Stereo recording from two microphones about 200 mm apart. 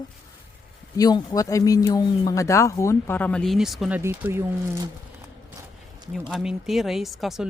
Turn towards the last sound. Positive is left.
turn(degrees=0)  # may be behind; listen again after turning